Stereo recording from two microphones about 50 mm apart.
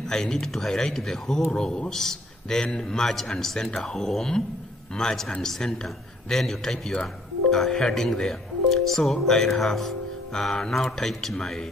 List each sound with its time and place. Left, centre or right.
0.1 s a man's voice: centre